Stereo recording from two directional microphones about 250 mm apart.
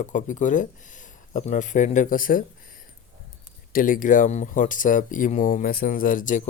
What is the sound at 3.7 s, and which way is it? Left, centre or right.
Speech, left.